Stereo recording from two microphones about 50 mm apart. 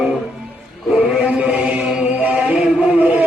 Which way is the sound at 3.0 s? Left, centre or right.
Right.